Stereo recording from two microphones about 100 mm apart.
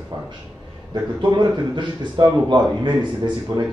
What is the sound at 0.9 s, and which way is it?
A man's voice, 45° right (ahead or behind).